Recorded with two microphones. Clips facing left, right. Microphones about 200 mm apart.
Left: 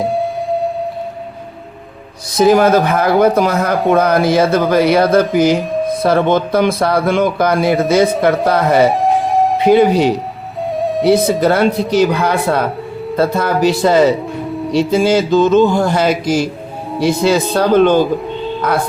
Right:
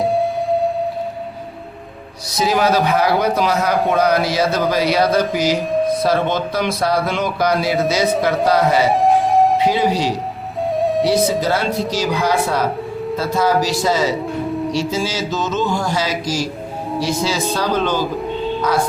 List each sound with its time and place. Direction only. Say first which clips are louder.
0.0 s music: even; centre (ahead or behind)
2.4 s speech: left 6 dB; 50° left (ahead or behind)
8.9 s siren: even; centre (ahead or behind)
9.6 s speech: left 7 dB; 55° left (ahead or behind)
10.8 s music: even; centre (ahead or behind)
11.0 s speech: left 10 dB; 55° left (ahead or behind)